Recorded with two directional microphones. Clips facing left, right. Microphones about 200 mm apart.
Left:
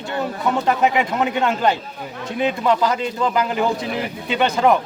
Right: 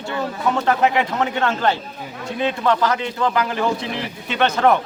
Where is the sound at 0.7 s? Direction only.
15° left (ahead or behind).